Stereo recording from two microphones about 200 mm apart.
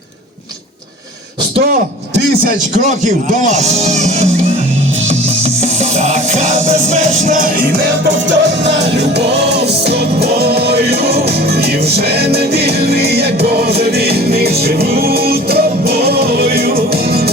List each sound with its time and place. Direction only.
3.0 s speech: 35° right (ahead or behind)
5.8 s music: 35° right (ahead or behind)
8.3 s music: 60° right (ahead or behind)